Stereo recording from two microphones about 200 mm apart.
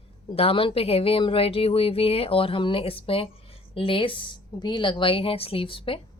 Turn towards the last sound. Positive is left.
turn(degrees=25)  # may be behind; listen again after turning